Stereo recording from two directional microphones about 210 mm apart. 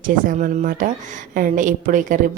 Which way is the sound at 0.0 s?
40° right (ahead or behind).